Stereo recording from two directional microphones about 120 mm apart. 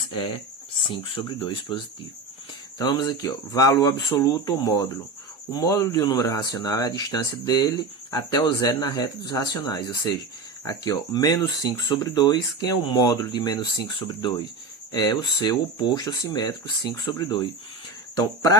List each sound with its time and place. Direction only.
0.9 s speech: 45° left (ahead or behind)